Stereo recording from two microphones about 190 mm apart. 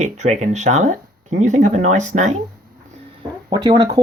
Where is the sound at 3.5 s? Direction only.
20° right (ahead or behind).